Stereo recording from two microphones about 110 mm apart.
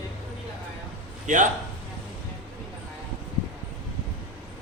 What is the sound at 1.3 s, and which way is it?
Speech, 90° right.